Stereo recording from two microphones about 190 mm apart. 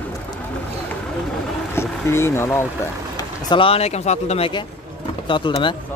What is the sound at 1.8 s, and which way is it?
Speech, 15° left (ahead or behind).